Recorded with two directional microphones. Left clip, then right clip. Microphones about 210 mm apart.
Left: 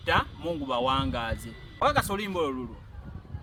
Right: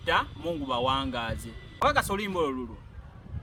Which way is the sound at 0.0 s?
15° right (ahead or behind).